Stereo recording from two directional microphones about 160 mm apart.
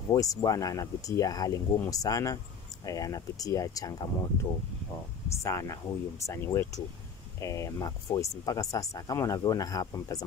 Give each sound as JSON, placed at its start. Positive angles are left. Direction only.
{"t": 0.1, "sound": "speech", "side_deg": 25}